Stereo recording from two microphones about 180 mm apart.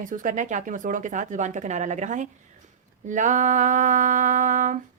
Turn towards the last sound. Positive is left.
turn(degrees=-45)  # may be behind; listen again after turning